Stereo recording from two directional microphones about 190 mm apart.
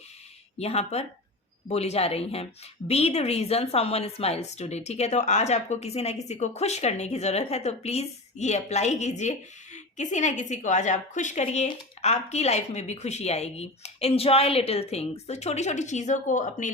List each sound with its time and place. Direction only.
0.6 s a woman's voice: 35° left (ahead or behind)